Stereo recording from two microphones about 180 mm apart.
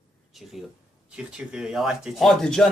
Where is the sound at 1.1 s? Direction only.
5° right (ahead or behind).